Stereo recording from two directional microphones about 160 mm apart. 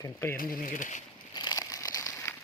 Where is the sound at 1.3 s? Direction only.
25° left (ahead or behind).